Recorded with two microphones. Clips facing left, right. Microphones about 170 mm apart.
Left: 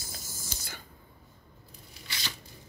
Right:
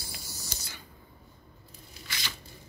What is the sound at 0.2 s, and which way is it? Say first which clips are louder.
Mechanisms: even; 45° left (ahead or behind).